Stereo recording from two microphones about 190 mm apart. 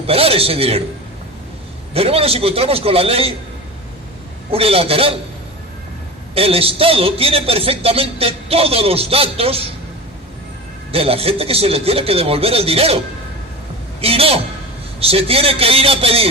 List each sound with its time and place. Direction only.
0.1 s a man's voice: 30° right (ahead or behind)
1.9 s a man's voice: 30° right (ahead or behind)
4.5 s a man's voice: 30° right (ahead or behind)
6.3 s a man's voice: 30° right (ahead or behind)
10.9 s a man's voice: 30° right (ahead or behind)
14.0 s a man's voice: 30° right (ahead or behind)